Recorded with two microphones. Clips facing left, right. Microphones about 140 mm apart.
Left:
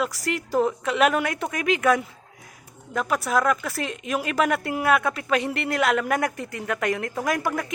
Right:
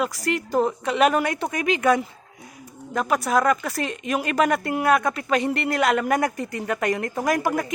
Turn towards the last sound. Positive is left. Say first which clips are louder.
# right 3 dB
turn(degrees=0)  # may be behind; listen again after turning